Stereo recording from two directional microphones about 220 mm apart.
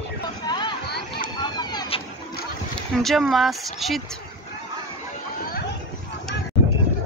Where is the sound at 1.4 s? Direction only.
20° left (ahead or behind).